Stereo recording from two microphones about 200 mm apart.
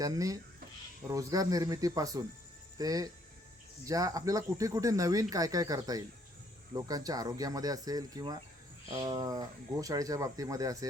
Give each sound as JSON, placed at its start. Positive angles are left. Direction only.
{"t": 0.0, "sound": "speech", "side_deg": -15}